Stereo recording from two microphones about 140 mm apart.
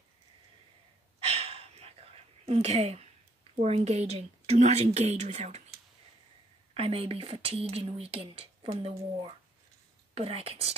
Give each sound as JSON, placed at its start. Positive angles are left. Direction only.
{"t": 1.2, "sound": "whispering", "side_deg": -45}
{"t": 3.6, "sound": "speech", "side_deg": -50}
{"t": 6.7, "sound": "speech", "side_deg": -40}